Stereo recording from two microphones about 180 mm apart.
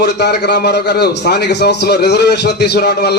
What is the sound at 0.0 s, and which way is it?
A man's voice, 70° left (ahead or behind).